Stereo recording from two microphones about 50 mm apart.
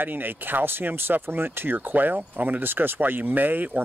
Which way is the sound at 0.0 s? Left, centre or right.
Right.